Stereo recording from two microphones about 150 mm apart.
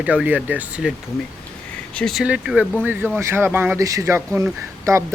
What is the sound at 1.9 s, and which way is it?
Speech, centre (ahead or behind).